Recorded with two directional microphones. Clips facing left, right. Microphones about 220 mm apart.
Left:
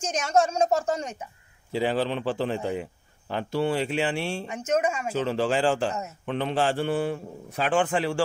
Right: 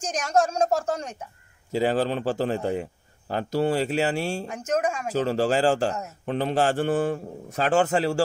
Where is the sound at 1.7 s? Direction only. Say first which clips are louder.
Right 2 dB; 45° right (ahead or behind).